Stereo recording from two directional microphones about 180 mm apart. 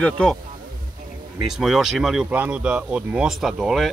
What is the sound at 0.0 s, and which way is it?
Speech, 5° left (ahead or behind).